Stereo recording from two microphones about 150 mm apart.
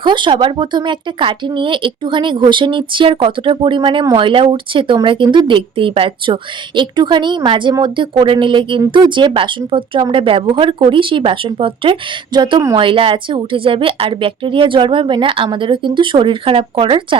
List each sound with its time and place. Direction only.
0.0 s speech: 30° right (ahead or behind)